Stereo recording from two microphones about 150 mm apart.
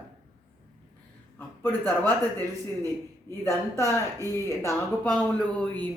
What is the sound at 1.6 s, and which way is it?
Speech, 15° left (ahead or behind).